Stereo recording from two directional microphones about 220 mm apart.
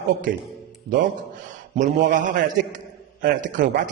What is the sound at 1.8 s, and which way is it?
A man's voice, 35° right (ahead or behind).